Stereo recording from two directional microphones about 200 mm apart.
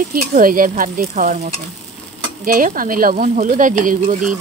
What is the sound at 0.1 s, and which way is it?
Speech, 45° right (ahead or behind).